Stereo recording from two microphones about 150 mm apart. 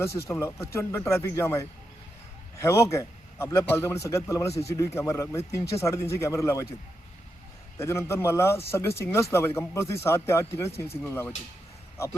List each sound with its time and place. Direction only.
0.0 s a man's voice: 20° left (ahead or behind)
7.8 s speech: 20° left (ahead or behind)